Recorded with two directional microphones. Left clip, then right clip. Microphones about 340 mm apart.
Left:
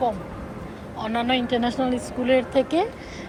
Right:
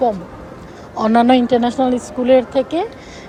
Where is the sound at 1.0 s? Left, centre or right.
Right.